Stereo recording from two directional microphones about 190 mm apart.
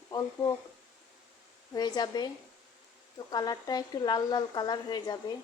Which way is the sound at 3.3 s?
20° left (ahead or behind).